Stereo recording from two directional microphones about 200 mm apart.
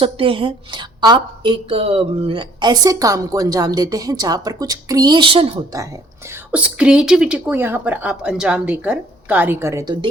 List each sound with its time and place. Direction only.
0.0 s a woman's voice: 25° right (ahead or behind)
6.3 s a woman's voice: 5° right (ahead or behind)